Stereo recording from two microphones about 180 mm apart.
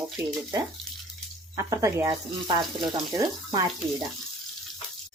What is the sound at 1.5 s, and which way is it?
Speech, 15° right (ahead or behind).